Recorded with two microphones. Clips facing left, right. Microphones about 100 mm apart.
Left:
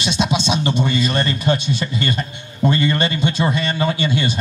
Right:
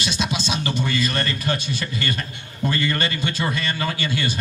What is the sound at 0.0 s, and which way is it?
A man's voice, 25° left (ahead or behind).